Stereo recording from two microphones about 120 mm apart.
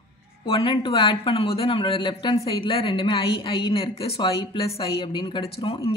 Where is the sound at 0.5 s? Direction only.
45° left (ahead or behind).